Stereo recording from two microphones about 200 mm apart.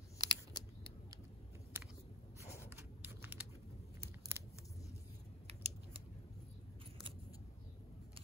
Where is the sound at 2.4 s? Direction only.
15° left (ahead or behind).